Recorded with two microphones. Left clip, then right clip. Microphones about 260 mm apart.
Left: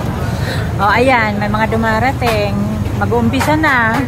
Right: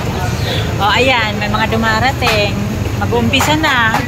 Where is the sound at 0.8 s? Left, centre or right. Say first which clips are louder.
Left 1 dB; left.